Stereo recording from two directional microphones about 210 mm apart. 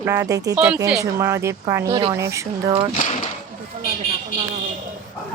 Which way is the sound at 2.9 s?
40° left (ahead or behind).